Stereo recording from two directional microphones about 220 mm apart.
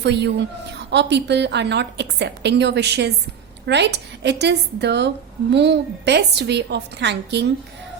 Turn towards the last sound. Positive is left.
turn(degrees=-50)  # may be behind; listen again after turning